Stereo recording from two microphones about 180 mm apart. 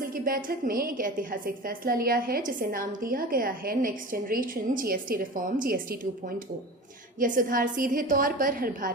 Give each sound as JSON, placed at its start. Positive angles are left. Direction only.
{"t": 0.1, "sound": "a woman's voice", "side_deg": -50}